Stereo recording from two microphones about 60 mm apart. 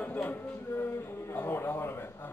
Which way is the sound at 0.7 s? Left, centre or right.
Left.